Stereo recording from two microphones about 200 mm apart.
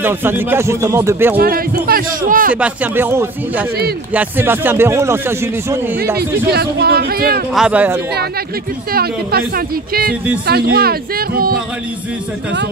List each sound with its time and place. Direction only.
0.0 s speech: 10° right (ahead or behind)
1.3 s speech: 50° right (ahead or behind)
2.5 s speech: 5° right (ahead or behind)
6.1 s speech: 50° right (ahead or behind)
7.5 s speech: 5° right (ahead or behind)
8.9 s speech: 50° right (ahead or behind)
10.4 s speech: 50° right (ahead or behind)